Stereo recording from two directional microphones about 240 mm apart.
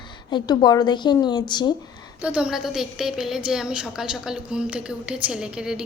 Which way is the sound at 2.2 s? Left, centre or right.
Centre.